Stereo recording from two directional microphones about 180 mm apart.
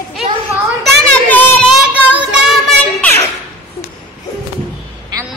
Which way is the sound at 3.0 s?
15° left (ahead or behind).